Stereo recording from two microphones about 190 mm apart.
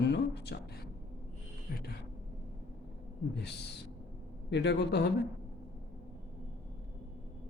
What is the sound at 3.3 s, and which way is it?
Speech, 60° left (ahead or behind).